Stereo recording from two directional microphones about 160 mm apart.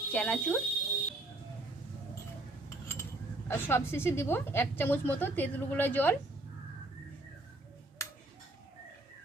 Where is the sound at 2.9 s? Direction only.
15° left (ahead or behind).